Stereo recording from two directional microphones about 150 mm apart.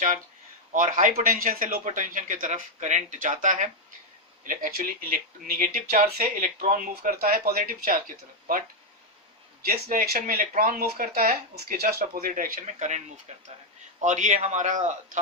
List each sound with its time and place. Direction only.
0.7 s speech: 60° right (ahead or behind)
9.6 s speech: 80° right; by 15.2 s 55° right (ahead or behind)